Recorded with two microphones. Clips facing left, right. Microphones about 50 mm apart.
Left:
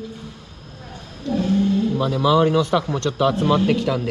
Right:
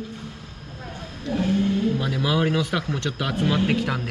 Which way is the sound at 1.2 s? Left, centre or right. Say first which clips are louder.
Left 3 dB; right.